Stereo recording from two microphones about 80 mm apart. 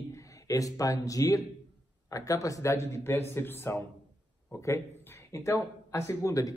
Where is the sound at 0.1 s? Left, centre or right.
Left.